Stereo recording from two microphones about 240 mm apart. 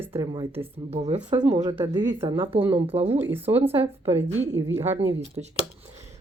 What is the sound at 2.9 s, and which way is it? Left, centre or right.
Speech, right.